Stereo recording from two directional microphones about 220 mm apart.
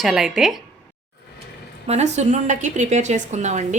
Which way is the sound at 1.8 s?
30° right (ahead or behind).